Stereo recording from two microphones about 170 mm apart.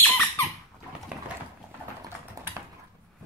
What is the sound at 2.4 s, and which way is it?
Typing, 20° right (ahead or behind).